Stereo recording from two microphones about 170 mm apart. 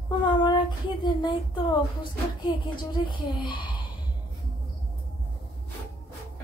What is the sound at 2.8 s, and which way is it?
A woman's voice, 30° left (ahead or behind).